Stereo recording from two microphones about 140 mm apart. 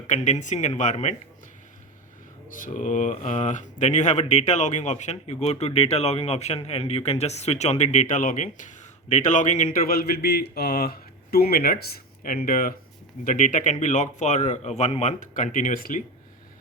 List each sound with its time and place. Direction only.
0.1 s speech: 60° left (ahead or behind)
2.5 s speech: 70° left (ahead or behind)
9.7 s speech: 90° left
13.2 s speech: 65° left (ahead or behind)